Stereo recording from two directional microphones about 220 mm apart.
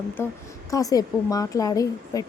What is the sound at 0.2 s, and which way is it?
A woman's voice, 10° left (ahead or behind).